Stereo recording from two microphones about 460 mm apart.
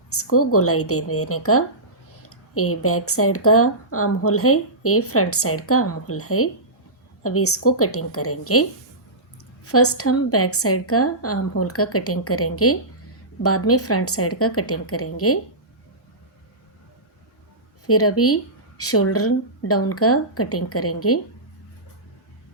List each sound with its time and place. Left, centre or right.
0.1 s speech: left
9.6 s speech: left
17.8 s speech: left